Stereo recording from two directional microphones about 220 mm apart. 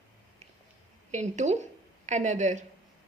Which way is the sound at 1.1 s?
30° right (ahead or behind).